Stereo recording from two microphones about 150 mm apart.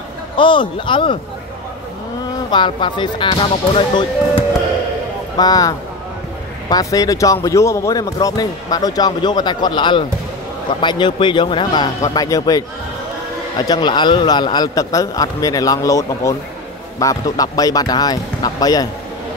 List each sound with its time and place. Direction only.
0.4 s speech: 35° left (ahead or behind)
2.5 s speech: 30° left (ahead or behind)
5.4 s speech: 25° left (ahead or behind)